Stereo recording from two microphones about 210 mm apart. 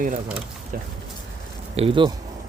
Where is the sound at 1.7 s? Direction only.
25° right (ahead or behind).